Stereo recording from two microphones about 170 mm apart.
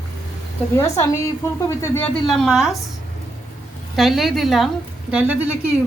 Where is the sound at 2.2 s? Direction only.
Centre (ahead or behind).